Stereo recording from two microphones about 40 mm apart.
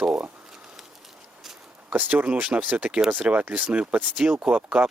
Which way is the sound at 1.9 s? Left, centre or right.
Right.